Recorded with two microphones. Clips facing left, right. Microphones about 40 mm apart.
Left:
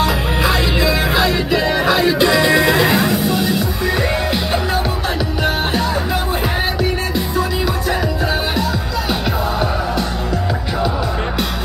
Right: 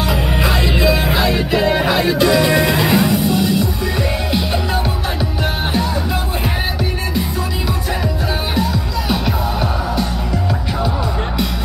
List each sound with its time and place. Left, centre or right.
1.3 s music: centre
2.1 s music: left
2.8 s music: centre